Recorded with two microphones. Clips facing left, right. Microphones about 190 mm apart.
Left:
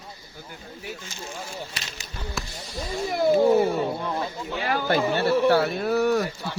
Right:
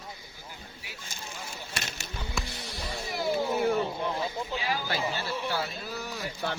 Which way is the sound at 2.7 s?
60° left (ahead or behind).